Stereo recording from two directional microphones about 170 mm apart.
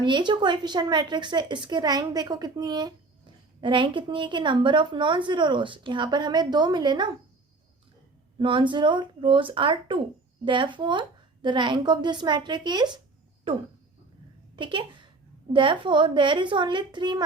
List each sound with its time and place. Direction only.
0.0 s a woman's voice: 25° right (ahead or behind)
8.4 s a woman's voice: 30° right (ahead or behind)
14.5 s a woman's voice: 30° right (ahead or behind)